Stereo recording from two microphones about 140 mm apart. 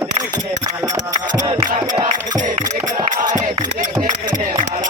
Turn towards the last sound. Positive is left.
turn(degrees=-60)  # may be behind; listen again after turning